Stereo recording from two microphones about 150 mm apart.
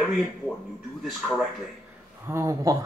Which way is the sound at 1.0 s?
Centre (ahead or behind).